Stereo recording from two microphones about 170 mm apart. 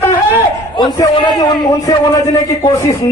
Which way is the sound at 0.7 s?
25° left (ahead or behind).